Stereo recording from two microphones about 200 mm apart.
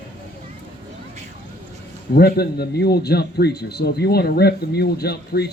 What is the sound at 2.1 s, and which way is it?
A man's voice, 50° left (ahead or behind).